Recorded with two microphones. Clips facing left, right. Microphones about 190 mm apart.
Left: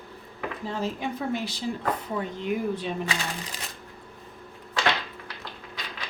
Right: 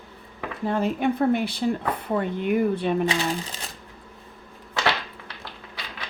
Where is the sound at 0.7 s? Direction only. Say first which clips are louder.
Right 8 dB; 55° right (ahead or behind).